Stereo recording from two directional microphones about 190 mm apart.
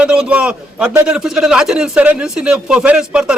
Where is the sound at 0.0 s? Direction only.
5° right (ahead or behind).